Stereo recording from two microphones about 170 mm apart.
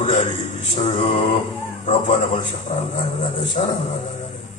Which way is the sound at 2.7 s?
45° left (ahead or behind).